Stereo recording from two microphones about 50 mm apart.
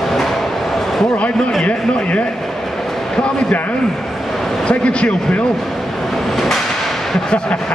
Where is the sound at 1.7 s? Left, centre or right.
Left.